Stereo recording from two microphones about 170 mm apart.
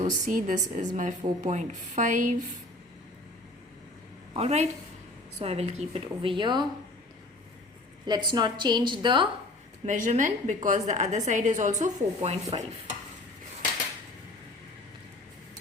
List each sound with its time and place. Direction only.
0.0 s a woman's voice: 50° right (ahead or behind)
4.4 s a woman's voice: 40° right (ahead or behind)
8.0 s a woman's voice: 25° right (ahead or behind)
9.8 s a woman's voice: 45° right (ahead or behind)